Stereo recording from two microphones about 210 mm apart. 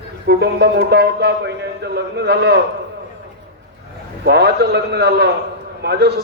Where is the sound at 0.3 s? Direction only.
50° right (ahead or behind).